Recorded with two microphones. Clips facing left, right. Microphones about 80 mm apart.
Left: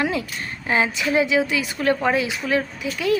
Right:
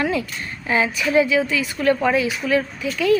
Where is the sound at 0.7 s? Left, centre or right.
Left.